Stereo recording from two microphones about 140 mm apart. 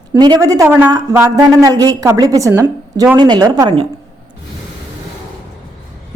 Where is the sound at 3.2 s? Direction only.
30° right (ahead or behind).